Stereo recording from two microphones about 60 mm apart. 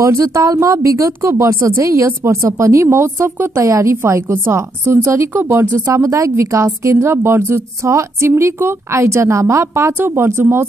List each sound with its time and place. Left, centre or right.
0.0 s a woman's voice: right
4.0 s a woman's voice: right
5.4 s speech: right
5.9 s a woman's voice: right
7.8 s a woman's voice: right
9.9 s a woman's voice: right